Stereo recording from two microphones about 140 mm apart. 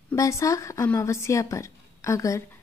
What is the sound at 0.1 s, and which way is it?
Speech, 20° left (ahead or behind).